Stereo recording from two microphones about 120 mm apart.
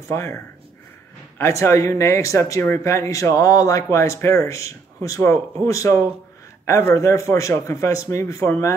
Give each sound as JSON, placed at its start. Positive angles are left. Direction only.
{"t": 0.1, "sound": "speech", "side_deg": 20}
{"t": 1.4, "sound": "speech", "side_deg": 25}